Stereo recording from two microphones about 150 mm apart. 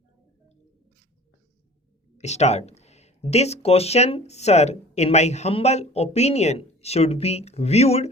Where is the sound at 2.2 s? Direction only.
50° left (ahead or behind).